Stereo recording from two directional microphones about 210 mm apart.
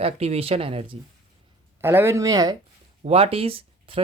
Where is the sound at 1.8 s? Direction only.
10° right (ahead or behind).